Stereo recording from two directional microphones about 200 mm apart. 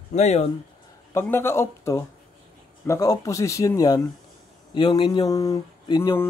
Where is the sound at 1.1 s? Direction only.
10° left (ahead or behind).